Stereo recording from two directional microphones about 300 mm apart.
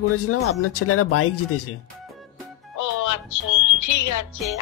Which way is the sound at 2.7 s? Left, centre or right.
Left.